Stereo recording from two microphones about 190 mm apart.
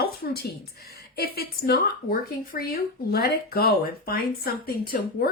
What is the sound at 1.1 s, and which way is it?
A woman's voice, 55° left (ahead or behind).